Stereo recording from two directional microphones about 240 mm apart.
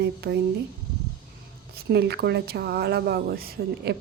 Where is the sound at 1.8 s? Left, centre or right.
Right.